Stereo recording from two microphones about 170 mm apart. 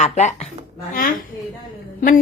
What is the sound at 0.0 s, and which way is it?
Speech, 40° left (ahead or behind).